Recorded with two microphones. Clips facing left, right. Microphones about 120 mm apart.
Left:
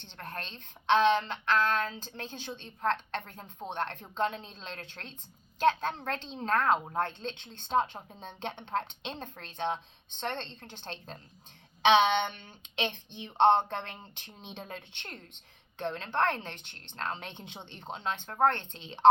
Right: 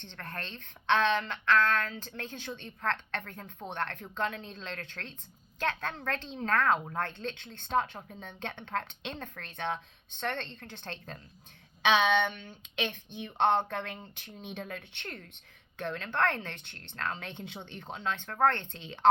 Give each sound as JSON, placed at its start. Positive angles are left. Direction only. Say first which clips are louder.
{"t": 0.2, "sound": "a woman's voice", "louder": "left 1 dB", "side_deg": 20}
{"t": 12.7, "sound": "a woman's voice", "louder": "left 1 dB", "side_deg": 25}